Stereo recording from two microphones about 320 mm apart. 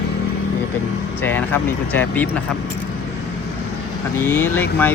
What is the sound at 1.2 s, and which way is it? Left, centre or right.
Mantra, centre.